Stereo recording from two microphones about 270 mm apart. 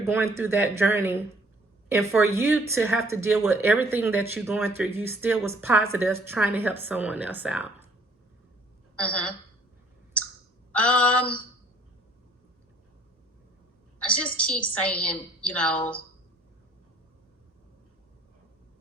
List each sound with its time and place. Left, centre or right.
0.1 s speech: centre
9.0 s speech: centre
10.7 s a sound: centre
14.0 s a woman's voice: centre